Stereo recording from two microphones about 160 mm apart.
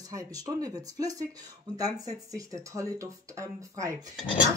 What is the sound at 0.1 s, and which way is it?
Speech, 20° right (ahead or behind).